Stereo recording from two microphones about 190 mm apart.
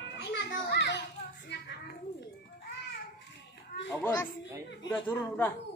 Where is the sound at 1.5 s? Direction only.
60° left (ahead or behind).